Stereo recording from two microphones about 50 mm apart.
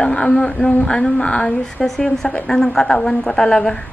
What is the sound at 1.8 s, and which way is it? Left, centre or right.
A woman's voice, centre.